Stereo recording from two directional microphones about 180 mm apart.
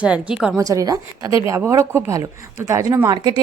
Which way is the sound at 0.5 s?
20° right (ahead or behind).